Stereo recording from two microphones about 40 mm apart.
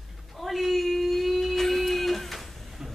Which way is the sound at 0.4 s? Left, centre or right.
Centre.